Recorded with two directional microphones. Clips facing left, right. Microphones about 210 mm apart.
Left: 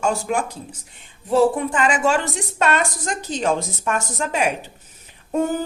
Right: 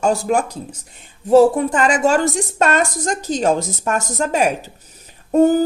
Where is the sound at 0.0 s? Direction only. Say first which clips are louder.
Right 4 dB; 40° right (ahead or behind).